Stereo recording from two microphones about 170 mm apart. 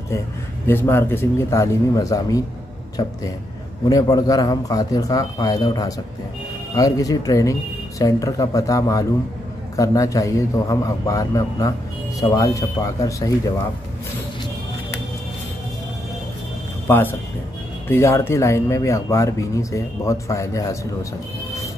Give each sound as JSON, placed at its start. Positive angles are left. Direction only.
{"t": 0.7, "sound": "speech", "side_deg": 15}
{"t": 16.8, "sound": "speech", "side_deg": 10}